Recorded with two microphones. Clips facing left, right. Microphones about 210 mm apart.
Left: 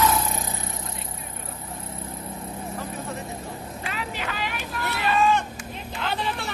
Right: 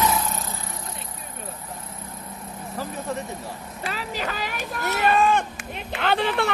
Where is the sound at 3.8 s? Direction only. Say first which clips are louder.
Right 4 dB; 40° right (ahead or behind); by 6.5 s 65° right (ahead or behind).